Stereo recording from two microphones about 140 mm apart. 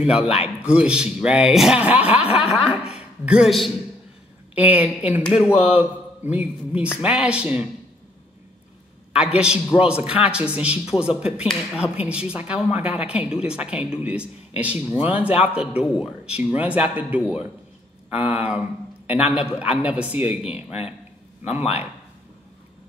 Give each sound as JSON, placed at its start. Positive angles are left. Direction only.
{"t": 0.2, "sound": "a man's voice", "side_deg": 45}
{"t": 0.7, "sound": "a woman's voice", "side_deg": -5}
{"t": 4.7, "sound": "a woman's voice", "side_deg": -10}
{"t": 9.1, "sound": "a woman's voice", "side_deg": -5}